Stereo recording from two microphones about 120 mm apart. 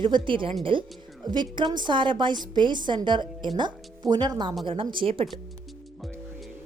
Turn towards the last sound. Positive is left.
turn(degrees=-45)  # may be behind; listen again after turning